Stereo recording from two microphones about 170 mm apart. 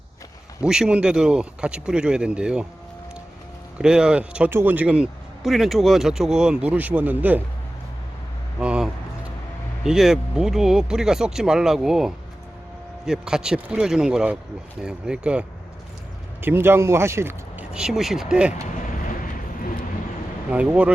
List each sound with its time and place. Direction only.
0.6 s speech: 5° right (ahead or behind)
3.8 s speech: 5° right (ahead or behind)
8.5 s speech: 5° right (ahead or behind)
18.9 s vehicle: 50° left (ahead or behind)
20.5 s speech: 10° right (ahead or behind)